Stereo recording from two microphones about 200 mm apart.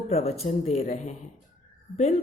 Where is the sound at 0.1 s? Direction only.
30° left (ahead or behind).